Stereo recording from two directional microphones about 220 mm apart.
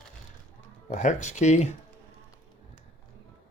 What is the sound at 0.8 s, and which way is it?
Speech, 35° left (ahead or behind).